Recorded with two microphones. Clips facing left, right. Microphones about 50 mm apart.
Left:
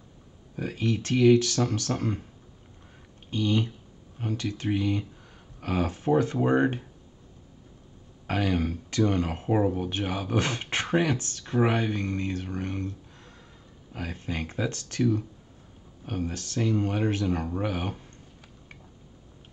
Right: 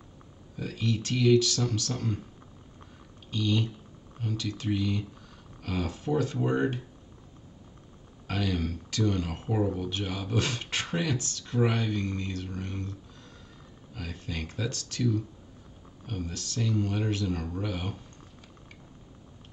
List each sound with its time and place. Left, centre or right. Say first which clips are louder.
0.6 s speech: left 3 dB; left
3.3 s speech: left 3 dB; left
8.3 s speech: left 4 dB; left
13.9 s speech: left 4 dB; left
16.1 s speech: left 4 dB; left